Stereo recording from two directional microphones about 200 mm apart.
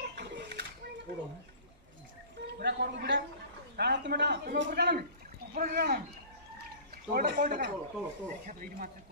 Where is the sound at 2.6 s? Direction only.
55° right (ahead or behind).